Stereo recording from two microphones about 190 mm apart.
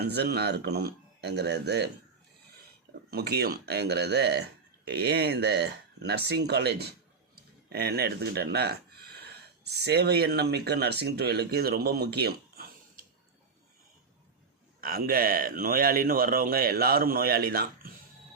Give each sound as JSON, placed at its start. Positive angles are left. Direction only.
{"t": 0.0, "sound": "speech", "side_deg": -60}
{"t": 3.1, "sound": "speech", "side_deg": -55}
{"t": 14.8, "sound": "a man's voice", "side_deg": -50}